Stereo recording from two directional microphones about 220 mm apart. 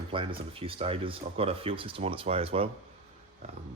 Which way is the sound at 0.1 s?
25° right (ahead or behind).